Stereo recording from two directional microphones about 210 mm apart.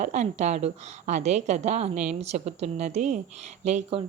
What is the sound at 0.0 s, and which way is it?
A woman's voice, 35° right (ahead or behind).